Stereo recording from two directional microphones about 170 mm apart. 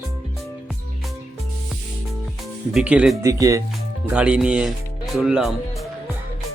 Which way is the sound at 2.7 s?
5° right (ahead or behind).